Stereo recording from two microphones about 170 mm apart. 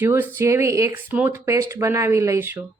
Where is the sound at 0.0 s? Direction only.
15° right (ahead or behind).